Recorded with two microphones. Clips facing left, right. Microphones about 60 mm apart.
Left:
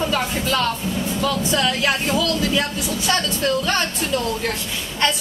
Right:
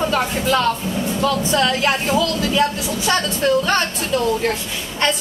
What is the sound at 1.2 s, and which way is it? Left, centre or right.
A woman's voice, centre.